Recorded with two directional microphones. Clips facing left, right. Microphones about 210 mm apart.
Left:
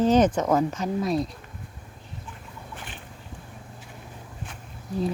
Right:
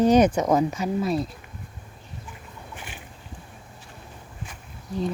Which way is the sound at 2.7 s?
10° right (ahead or behind).